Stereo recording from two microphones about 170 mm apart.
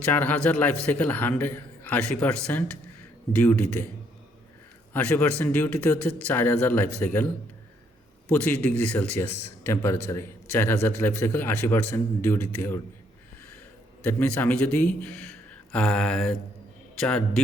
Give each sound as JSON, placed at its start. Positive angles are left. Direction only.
{"t": 0.0, "sound": "a man's voice", "side_deg": 10}
{"t": 4.9, "sound": "a man's voice", "side_deg": 10}
{"t": 8.3, "sound": "a man's voice", "side_deg": 10}
{"t": 14.0, "sound": "a man's voice", "side_deg": 10}